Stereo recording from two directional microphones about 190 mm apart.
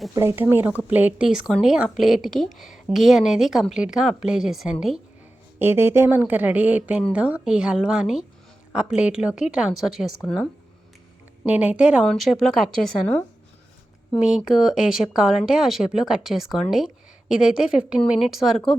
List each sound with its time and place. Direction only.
0.1 s a woman's voice: 15° right (ahead or behind); by 10.5 s 5° left (ahead or behind)
11.4 s speech: 5° right (ahead or behind)